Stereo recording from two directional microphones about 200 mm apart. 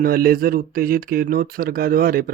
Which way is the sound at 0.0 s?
45° right (ahead or behind).